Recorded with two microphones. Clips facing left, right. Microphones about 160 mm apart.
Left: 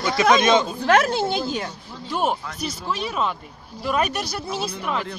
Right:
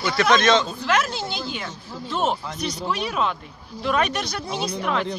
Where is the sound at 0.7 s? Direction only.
50° left (ahead or behind).